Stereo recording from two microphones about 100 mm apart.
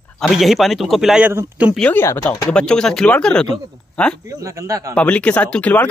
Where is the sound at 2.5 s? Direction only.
10° left (ahead or behind).